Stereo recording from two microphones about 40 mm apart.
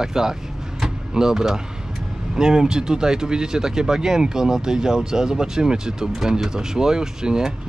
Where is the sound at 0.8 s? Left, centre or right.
Centre.